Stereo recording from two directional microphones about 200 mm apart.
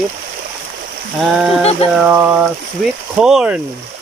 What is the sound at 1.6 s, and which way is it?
Speech, 30° left (ahead or behind).